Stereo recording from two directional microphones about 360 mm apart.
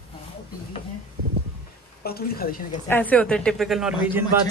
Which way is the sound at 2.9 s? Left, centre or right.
Centre.